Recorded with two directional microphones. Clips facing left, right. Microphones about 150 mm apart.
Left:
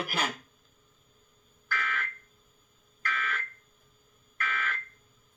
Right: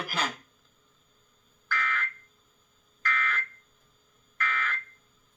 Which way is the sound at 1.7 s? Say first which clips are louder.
Right 2 dB; 15° left (ahead or behind).